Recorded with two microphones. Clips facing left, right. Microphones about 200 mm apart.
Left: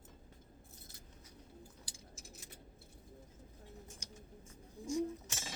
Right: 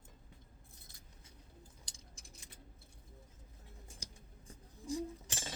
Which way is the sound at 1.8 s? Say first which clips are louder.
Left 4 dB; 5° left (ahead or behind).